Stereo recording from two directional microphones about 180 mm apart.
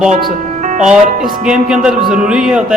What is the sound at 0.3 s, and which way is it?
Music, 45° right (ahead or behind).